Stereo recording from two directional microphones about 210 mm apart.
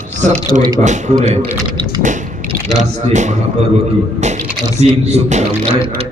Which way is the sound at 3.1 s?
35° right (ahead or behind).